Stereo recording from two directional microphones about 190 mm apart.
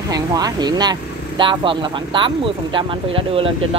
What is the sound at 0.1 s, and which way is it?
Speech, 20° right (ahead or behind).